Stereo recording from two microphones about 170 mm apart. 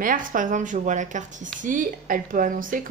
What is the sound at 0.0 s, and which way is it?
Speech, 50° right (ahead or behind).